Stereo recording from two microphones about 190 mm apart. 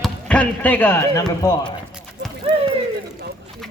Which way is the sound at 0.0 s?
5° left (ahead or behind).